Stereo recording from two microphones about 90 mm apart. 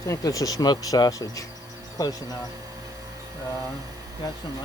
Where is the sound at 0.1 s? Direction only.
40° left (ahead or behind).